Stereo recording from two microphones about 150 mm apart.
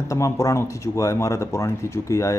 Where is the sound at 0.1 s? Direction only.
20° left (ahead or behind).